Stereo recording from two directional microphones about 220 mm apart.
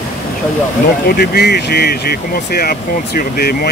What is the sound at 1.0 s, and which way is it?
Speech, 45° left (ahead or behind).